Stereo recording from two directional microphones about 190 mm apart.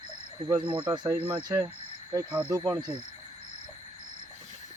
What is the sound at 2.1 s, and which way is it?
Speech, 10° right (ahead or behind).